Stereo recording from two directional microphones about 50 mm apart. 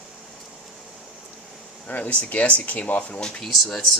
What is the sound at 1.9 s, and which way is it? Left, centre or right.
Speech, left.